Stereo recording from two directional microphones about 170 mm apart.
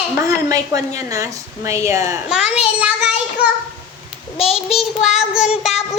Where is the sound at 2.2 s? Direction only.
5° right (ahead or behind).